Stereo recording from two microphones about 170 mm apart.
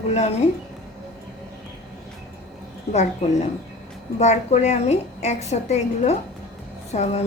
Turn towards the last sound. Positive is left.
turn(degrees=40)  # may be behind; listen again after turning